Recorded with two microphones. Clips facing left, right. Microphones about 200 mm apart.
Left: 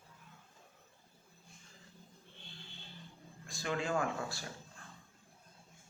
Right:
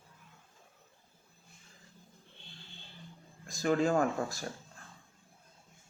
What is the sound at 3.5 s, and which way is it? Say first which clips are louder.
Speech: right 8 dB; 40° right (ahead or behind).